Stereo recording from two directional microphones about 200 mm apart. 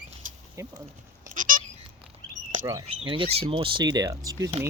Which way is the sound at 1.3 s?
40° right (ahead or behind).